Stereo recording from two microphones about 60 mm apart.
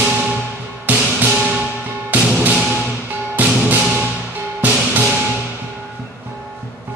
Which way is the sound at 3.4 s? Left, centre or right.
Right.